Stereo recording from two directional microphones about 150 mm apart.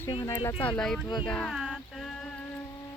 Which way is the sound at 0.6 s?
5° left (ahead or behind).